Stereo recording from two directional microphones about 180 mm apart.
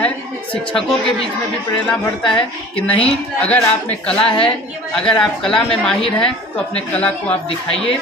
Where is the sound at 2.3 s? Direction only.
30° left (ahead or behind).